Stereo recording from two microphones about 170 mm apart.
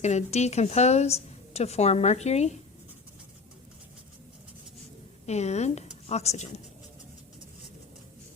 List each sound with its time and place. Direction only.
0.0 s a woman's voice: 40° left (ahead or behind)
5.2 s a woman's voice: 40° left (ahead or behind)